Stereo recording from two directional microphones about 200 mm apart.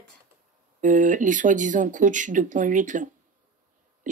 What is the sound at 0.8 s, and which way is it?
Speech, 40° right (ahead or behind).